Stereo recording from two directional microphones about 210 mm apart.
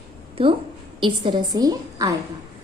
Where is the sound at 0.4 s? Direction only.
25° right (ahead or behind).